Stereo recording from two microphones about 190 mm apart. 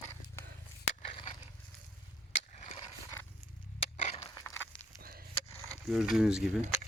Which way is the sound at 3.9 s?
35° left (ahead or behind).